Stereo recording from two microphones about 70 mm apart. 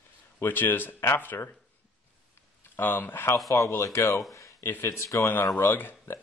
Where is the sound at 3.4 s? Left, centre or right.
Left.